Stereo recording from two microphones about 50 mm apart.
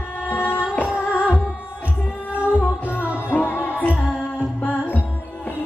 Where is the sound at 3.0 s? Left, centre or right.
Right.